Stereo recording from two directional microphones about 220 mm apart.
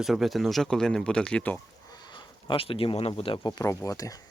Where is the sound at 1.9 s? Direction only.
20° left (ahead or behind).